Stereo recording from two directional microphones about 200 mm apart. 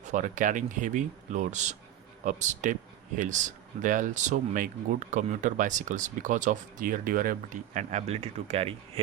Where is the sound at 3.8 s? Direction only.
40° right (ahead or behind).